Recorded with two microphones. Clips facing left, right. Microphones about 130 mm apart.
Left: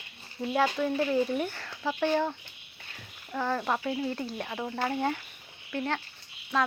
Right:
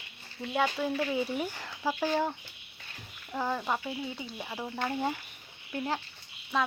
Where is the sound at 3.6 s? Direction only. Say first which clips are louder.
Left 3 dB; centre (ahead or behind).